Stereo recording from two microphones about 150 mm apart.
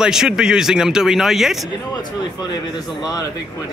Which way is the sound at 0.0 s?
5° right (ahead or behind).